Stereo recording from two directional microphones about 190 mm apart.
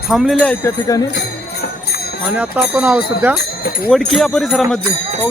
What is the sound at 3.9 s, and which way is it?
Speech, centre (ahead or behind).